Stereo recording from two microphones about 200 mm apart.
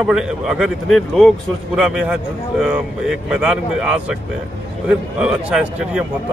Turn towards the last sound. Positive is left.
turn(degrees=-5)  # may be behind; listen again after turning